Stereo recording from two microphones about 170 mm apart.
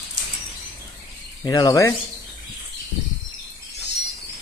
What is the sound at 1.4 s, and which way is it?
Speech, 25° left (ahead or behind).